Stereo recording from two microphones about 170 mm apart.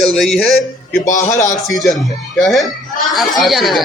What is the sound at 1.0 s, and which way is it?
Speech, 45° left (ahead or behind).